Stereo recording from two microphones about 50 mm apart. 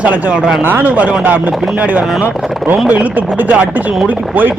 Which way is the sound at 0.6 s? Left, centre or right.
Right.